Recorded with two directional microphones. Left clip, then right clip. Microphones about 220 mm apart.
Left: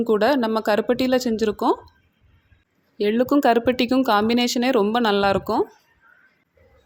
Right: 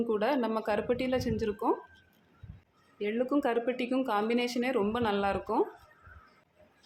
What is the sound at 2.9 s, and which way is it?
Speech, 40° left (ahead or behind).